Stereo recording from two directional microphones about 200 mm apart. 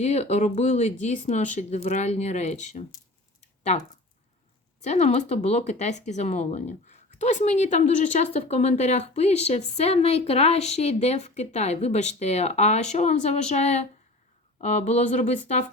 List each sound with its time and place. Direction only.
0.0 s speech: 30° left (ahead or behind)
3.4 s a sound: 35° left (ahead or behind)
4.8 s speech: 35° left (ahead or behind)